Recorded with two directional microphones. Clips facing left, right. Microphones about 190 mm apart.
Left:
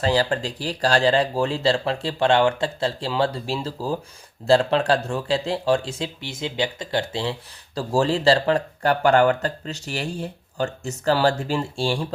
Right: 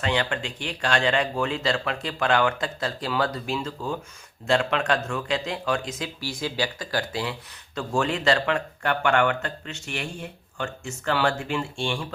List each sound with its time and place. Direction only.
0.0 s speech: 35° left (ahead or behind)